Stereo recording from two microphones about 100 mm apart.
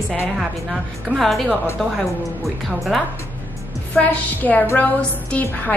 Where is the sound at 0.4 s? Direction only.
Centre (ahead or behind).